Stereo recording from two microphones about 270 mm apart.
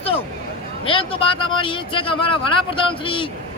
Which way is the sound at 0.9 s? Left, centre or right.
Centre.